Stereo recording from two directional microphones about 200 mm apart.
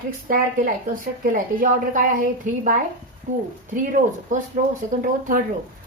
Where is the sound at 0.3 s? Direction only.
45° right (ahead or behind).